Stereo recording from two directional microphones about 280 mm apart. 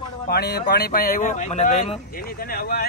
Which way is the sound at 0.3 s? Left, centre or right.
Left.